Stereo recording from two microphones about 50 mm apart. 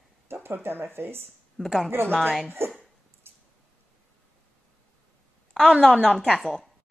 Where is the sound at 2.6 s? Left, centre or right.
Right.